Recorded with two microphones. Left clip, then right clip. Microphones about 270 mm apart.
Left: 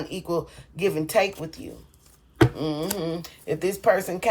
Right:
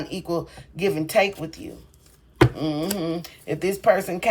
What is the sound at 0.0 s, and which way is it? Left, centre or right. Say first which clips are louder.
Speech: even; left.